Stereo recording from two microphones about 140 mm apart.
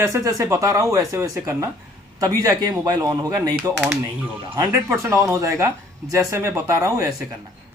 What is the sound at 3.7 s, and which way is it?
Speech, 5° right (ahead or behind).